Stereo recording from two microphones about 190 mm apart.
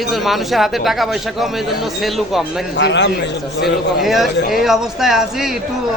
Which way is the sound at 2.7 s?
70° left (ahead or behind).